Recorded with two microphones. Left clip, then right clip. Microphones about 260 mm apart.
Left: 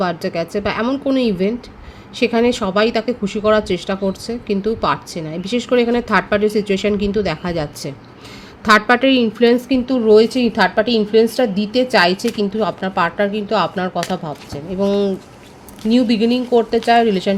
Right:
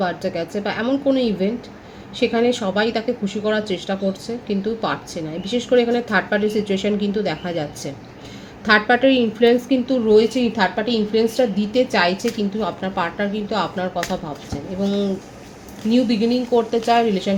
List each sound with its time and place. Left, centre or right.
0.0 s speech: left